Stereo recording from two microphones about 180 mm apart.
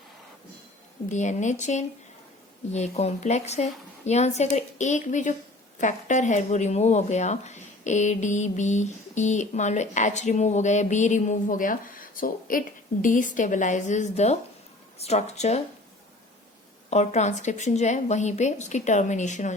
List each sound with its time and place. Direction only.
1.1 s speech: 40° left (ahead or behind)
16.9 s speech: 40° left (ahead or behind)